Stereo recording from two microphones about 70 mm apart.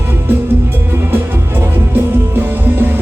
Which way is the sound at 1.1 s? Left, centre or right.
Right.